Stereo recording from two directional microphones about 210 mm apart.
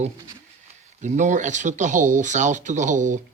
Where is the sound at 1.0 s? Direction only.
35° right (ahead or behind).